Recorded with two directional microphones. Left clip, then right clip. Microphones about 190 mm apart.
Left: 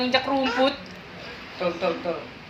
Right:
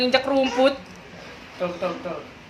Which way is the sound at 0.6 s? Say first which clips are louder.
Right 4 dB; 45° right (ahead or behind).